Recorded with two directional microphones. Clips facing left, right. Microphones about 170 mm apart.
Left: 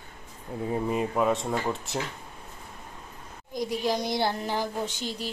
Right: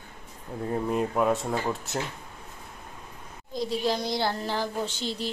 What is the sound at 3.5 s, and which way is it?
Speech, 15° left (ahead or behind).